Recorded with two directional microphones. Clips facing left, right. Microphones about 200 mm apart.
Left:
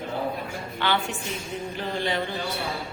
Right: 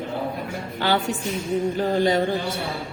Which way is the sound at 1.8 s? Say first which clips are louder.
Right 6 dB; 45° right (ahead or behind).